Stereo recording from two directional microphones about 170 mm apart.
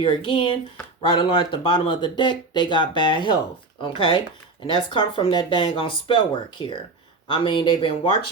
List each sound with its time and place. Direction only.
0.0 s speech: 30° left (ahead or behind)